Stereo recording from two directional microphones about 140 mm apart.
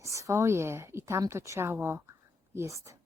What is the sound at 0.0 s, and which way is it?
A woman's voice, 20° right (ahead or behind).